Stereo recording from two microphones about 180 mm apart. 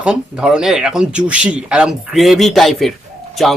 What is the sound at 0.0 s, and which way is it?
Speech, 5° right (ahead or behind).